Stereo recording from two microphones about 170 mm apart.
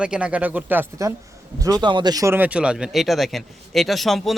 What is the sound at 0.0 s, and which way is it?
Speech, 5° right (ahead or behind).